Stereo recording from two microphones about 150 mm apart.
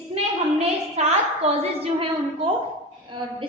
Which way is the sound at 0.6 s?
45° right (ahead or behind).